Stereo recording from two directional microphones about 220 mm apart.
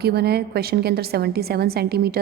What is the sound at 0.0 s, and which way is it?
A woman's voice, 45° right (ahead or behind).